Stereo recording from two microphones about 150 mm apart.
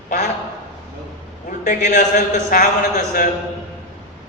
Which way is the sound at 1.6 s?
55° left (ahead or behind).